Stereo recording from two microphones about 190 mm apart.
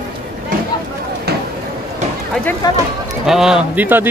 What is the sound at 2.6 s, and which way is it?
Speech, 20° left (ahead or behind).